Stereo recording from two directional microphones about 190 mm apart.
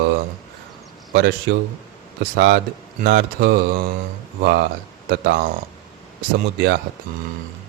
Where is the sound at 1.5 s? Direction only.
75° right (ahead or behind).